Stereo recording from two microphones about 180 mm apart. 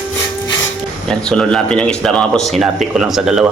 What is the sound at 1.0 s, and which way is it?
Speech, 5° left (ahead or behind).